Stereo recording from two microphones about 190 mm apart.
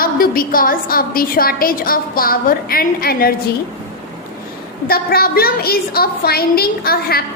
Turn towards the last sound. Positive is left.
turn(degrees=50)  # may be behind; listen again after turning